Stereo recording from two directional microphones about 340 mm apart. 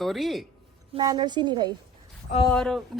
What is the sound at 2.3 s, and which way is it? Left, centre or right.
Speech, centre.